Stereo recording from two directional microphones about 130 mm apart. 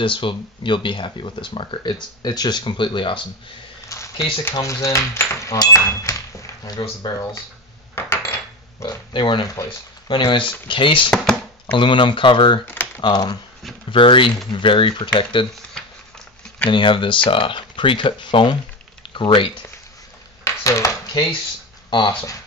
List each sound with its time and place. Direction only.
0.0 s speech: 40° left (ahead or behind)
3.9 s a sound: 25° left (ahead or behind)
4.6 s speech: 25° left (ahead or behind)
7.9 s cutlery: 20° left (ahead or behind)
8.7 s speech: 35° left (ahead or behind)
16.7 s speech: 40° left (ahead or behind)
20.4 s a sound: 25° left (ahead or behind)
21.9 s speech: 40° left (ahead or behind)